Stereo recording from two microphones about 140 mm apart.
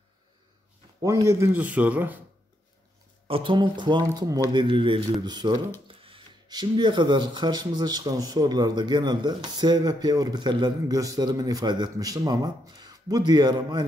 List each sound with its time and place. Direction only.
1.0 s speech: 20° right (ahead or behind)
3.3 s speech: 40° right (ahead or behind)